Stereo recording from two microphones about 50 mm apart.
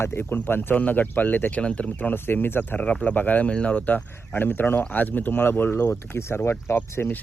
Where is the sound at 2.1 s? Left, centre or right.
Left.